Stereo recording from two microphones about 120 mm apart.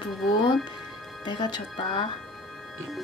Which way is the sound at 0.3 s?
35° left (ahead or behind).